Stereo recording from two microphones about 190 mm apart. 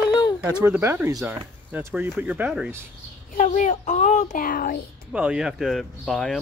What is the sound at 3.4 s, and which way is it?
A child's voice, 40° left (ahead or behind).